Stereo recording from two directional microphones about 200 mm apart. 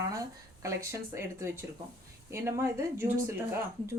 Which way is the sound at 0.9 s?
15° right (ahead or behind).